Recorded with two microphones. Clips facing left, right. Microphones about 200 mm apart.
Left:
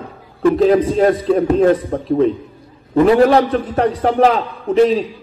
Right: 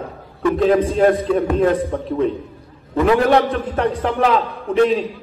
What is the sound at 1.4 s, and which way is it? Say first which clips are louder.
A man's voice: left 3 dB; 40° left (ahead or behind).